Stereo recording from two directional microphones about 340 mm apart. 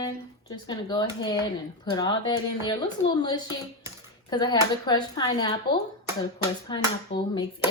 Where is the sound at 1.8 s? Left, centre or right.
Centre.